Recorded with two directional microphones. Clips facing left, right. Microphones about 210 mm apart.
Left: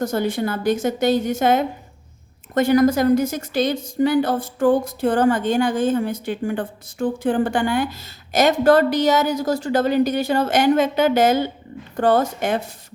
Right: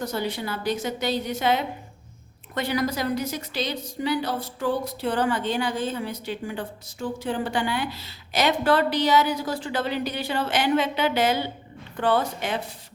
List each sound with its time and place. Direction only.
0.0 s a woman's voice: 50° left (ahead or behind)